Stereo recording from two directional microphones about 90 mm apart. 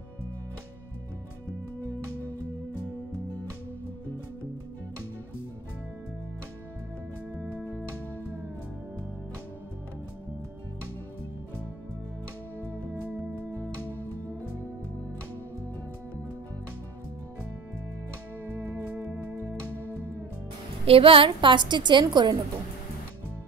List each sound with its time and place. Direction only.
7.3 s music: 15° right (ahead or behind)
13.8 s music: 20° left (ahead or behind)
18.4 s music: 30° right (ahead or behind)
20.8 s a woman's voice: 90° right; by 22.4 s 55° right (ahead or behind)